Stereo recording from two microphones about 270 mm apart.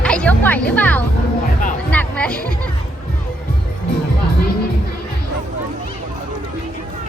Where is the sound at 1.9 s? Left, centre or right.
Centre.